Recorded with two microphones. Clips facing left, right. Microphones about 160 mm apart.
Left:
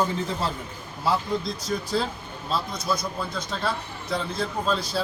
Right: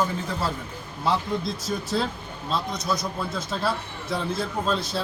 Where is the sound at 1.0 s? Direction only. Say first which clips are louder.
Even; centre (ahead or behind).